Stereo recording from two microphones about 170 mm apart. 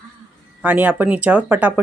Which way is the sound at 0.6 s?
10° right (ahead or behind).